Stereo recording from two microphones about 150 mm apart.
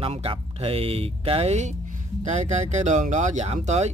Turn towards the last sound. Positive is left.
turn(degrees=-50)  # may be behind; listen again after turning